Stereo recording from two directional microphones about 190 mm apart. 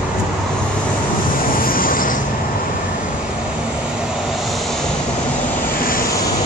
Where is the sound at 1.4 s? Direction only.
50° left (ahead or behind).